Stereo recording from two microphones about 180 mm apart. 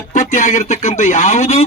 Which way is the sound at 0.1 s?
45° left (ahead or behind).